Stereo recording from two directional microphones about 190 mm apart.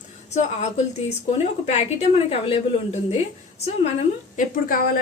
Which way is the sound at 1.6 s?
35° left (ahead or behind).